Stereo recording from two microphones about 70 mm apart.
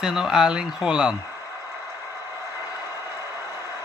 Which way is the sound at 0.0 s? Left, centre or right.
Centre.